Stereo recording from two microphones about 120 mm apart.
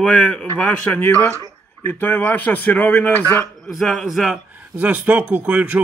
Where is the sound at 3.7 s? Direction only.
Centre (ahead or behind).